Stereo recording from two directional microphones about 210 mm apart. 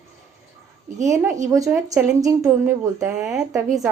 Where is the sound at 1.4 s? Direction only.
15° right (ahead or behind).